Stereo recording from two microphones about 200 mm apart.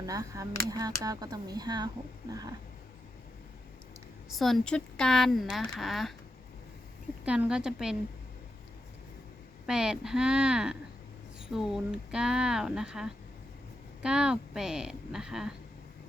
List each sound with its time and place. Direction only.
0.0 s speech: 15° right (ahead or behind)
4.3 s speech: centre (ahead or behind)
7.3 s speech: 5° right (ahead or behind)
9.6 s speech: 5° right (ahead or behind)